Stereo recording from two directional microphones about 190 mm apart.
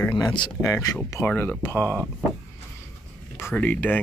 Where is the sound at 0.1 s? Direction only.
25° left (ahead or behind).